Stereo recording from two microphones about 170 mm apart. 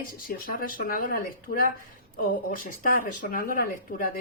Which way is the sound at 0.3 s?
55° left (ahead or behind).